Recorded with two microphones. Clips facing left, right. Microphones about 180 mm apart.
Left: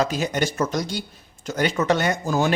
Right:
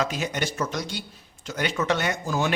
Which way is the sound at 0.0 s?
35° left (ahead or behind).